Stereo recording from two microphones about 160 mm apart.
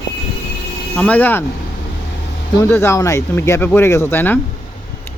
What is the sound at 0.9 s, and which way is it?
Speech, 10° left (ahead or behind).